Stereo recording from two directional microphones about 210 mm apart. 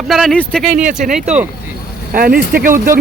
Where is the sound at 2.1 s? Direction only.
45° right (ahead or behind).